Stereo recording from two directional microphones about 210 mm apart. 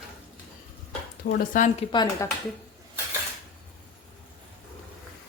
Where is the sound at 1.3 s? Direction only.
40° left (ahead or behind).